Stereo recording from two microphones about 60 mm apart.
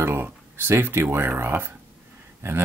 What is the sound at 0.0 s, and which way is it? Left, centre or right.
Speech, right.